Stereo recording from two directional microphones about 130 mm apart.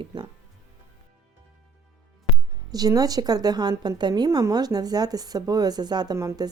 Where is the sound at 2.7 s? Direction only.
30° right (ahead or behind).